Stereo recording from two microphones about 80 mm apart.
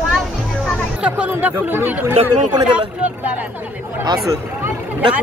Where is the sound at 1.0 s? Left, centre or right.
Centre.